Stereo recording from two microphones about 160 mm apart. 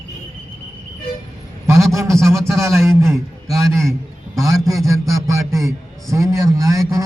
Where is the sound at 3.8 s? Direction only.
Centre (ahead or behind).